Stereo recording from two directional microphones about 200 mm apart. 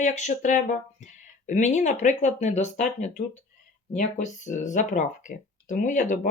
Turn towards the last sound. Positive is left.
turn(degrees=40)  # may be behind; listen again after turning